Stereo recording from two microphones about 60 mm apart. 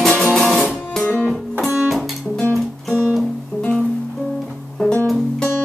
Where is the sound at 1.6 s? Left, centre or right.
Centre.